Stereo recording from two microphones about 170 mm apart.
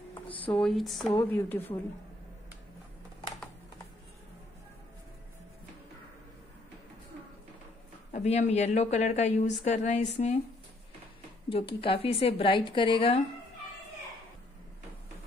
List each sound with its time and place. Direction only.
0.1 s speech: 10° left (ahead or behind)
1.1 s a woman's voice: 15° left (ahead or behind)
8.1 s a woman's voice: 40° left (ahead or behind)
11.4 s a woman's voice: 30° left (ahead or behind)